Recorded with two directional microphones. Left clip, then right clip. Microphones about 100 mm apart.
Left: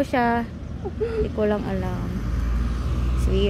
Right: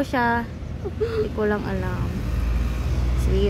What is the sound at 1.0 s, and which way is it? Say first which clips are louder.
Speech: right 1 dB; 5° right (ahead or behind).